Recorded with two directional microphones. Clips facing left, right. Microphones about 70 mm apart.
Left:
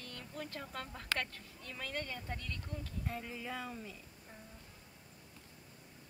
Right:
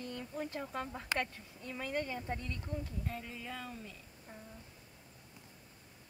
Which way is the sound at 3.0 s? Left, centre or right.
Centre.